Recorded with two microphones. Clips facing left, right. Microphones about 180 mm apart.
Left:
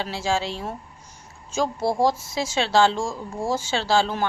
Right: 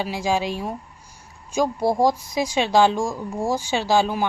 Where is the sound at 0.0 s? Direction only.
15° right (ahead or behind).